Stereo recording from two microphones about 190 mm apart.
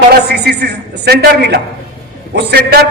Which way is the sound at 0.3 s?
60° right (ahead or behind).